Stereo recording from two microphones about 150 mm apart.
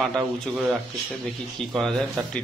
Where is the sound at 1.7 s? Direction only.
5° left (ahead or behind).